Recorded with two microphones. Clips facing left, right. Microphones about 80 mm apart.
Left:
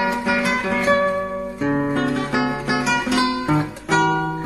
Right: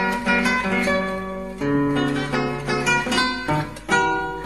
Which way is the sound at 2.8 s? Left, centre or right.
Centre.